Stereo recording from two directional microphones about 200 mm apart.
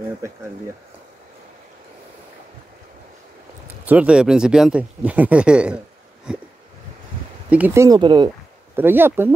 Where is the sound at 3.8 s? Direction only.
5° right (ahead or behind).